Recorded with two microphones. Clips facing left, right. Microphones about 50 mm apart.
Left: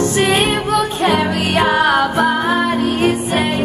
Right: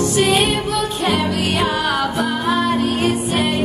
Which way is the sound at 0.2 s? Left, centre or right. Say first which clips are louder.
Even; left.